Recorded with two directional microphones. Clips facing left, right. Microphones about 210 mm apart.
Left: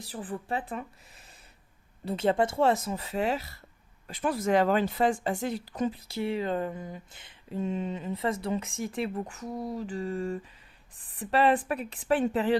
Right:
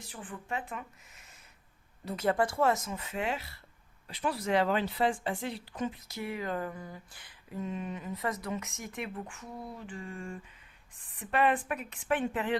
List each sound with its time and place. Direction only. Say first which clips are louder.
0.0 s speech: left 7 dB; 35° left (ahead or behind)